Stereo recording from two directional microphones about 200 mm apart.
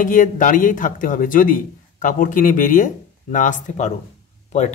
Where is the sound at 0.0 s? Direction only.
40° left (ahead or behind).